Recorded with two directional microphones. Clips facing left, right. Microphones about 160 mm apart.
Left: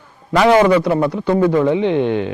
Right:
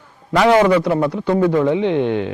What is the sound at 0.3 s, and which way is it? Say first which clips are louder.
Speech: left 1 dB; 15° left (ahead or behind).